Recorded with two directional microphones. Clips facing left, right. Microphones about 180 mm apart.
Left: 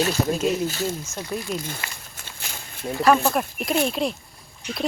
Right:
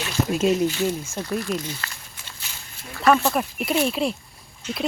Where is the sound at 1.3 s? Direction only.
10° left (ahead or behind).